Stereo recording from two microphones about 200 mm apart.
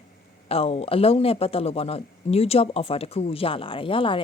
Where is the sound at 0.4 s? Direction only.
30° left (ahead or behind).